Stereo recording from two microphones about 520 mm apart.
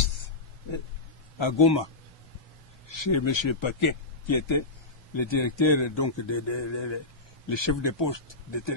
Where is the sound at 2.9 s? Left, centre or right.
Left.